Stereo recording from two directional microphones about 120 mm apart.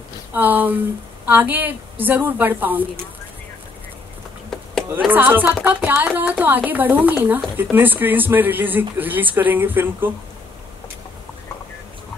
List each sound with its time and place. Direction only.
0.3 s speech: 15° right (ahead or behind)
4.5 s a sound: 5° left (ahead or behind)
5.1 s speech: 15° right (ahead or behind)